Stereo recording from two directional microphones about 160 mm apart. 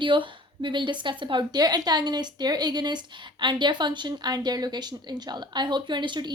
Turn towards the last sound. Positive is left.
turn(degrees=-30)  # may be behind; listen again after turning